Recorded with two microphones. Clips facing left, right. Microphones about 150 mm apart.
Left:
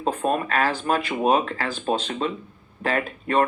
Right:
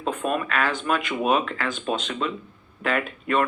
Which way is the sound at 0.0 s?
35° left (ahead or behind).